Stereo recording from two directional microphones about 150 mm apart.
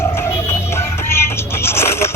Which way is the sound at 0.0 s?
15° left (ahead or behind).